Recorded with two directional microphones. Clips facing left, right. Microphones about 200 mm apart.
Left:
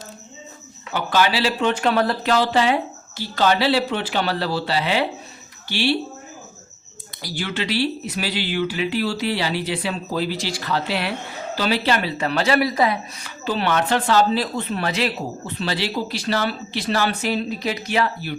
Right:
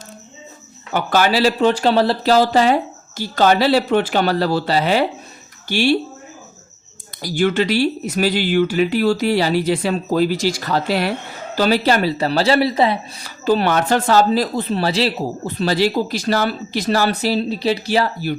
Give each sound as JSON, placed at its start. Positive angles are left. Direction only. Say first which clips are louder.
{"t": 0.9, "sound": "speech", "louder": "right 4 dB", "side_deg": -45}
{"t": 7.2, "sound": "speech", "louder": "right 10 dB", "side_deg": -50}